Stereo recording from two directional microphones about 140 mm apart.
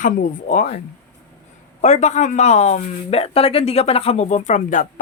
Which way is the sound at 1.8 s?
55° left (ahead or behind).